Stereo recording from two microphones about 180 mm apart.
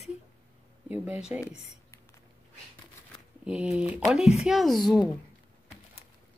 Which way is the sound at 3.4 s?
5° right (ahead or behind).